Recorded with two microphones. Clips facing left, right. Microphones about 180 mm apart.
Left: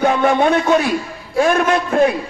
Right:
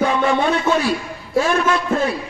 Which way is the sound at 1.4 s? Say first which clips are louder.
Left 5 dB; 55° left (ahead or behind).